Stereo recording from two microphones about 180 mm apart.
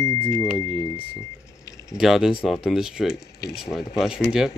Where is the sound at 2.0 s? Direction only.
Centre (ahead or behind).